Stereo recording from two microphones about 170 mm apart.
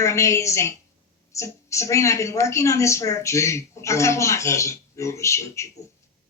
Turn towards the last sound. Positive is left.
turn(degrees=15)  # may be behind; listen again after turning